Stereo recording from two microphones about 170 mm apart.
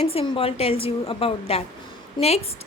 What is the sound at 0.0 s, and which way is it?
A woman's voice, 35° left (ahead or behind).